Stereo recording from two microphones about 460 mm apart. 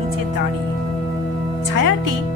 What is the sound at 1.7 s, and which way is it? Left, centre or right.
Speech, right.